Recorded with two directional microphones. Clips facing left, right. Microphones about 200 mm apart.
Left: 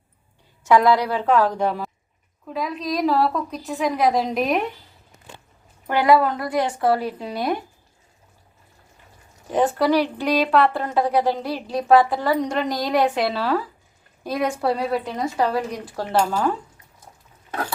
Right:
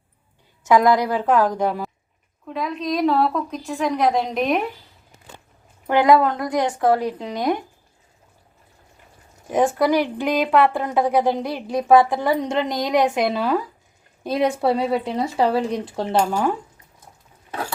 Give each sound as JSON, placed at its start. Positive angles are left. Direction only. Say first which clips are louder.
{"t": 0.6, "sound": "speech", "louder": "right 1 dB", "side_deg": -15}
{"t": 2.5, "sound": "a woman's voice", "louder": "right 1 dB", "side_deg": 0}
{"t": 5.9, "sound": "speech", "louder": "right 2 dB", "side_deg": -15}
{"t": 6.1, "sound": "a woman's voice", "louder": "right 1 dB", "side_deg": 5}
{"t": 6.4, "sound": "speech", "louder": "right 1 dB", "side_deg": -15}
{"t": 9.5, "sound": "speech", "louder": "right 1 dB", "side_deg": -10}
{"t": 16.1, "sound": "speech", "louder": "even", "side_deg": -10}